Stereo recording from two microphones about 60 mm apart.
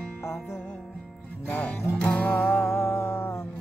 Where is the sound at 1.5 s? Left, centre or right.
Left.